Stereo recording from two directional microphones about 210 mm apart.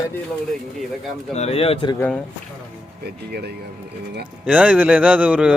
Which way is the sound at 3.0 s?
50° right (ahead or behind).